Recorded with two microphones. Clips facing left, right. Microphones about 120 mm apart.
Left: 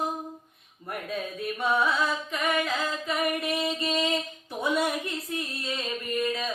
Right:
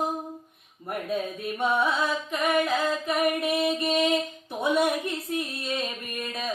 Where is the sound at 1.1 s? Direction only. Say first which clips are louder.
Right 2 dB; 20° right (ahead or behind).